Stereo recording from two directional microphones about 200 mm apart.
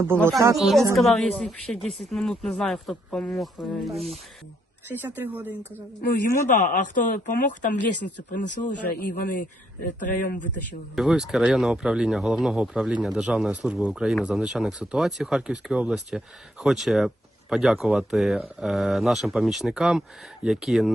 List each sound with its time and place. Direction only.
0.5 s speech: centre (ahead or behind)
4.9 s speech: 10° right (ahead or behind)
6.0 s speech: 45° left (ahead or behind)
10.9 s speech: centre (ahead or behind)